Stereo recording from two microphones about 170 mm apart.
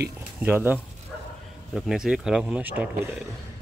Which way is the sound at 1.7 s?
5° right (ahead or behind).